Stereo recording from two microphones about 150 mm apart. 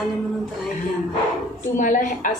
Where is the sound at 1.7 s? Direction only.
60° left (ahead or behind).